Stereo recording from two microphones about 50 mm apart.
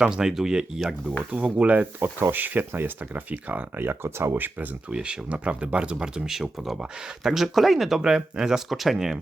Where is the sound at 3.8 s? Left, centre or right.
Right.